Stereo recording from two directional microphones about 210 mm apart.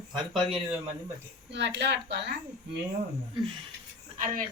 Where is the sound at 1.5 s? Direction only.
55° right (ahead or behind).